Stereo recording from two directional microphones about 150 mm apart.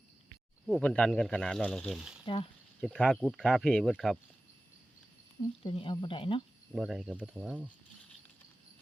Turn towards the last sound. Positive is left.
turn(degrees=-10)  # may be behind; listen again after turning